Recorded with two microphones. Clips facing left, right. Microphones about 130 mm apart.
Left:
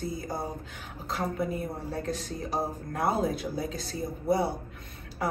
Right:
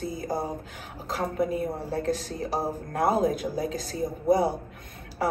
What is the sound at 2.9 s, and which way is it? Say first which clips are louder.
Speech: right 5 dB; 45° right (ahead or behind).